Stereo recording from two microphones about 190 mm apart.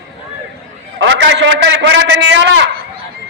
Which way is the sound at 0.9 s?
70° right (ahead or behind).